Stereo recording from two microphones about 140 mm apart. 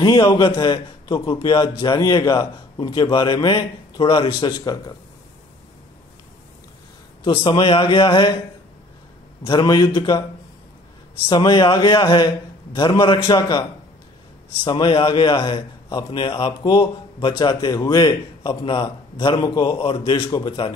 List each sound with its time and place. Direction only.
0.0 s a man's voice: 30° left (ahead or behind)
7.2 s a man's voice: 35° left (ahead or behind)
9.4 s a man's voice: 30° left (ahead or behind)
11.2 s a man's voice: 30° left (ahead or behind)